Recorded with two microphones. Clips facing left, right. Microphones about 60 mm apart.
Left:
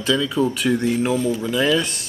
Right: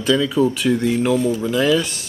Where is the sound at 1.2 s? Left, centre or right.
Right.